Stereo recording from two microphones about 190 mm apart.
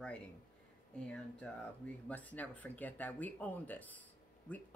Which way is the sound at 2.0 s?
10° left (ahead or behind).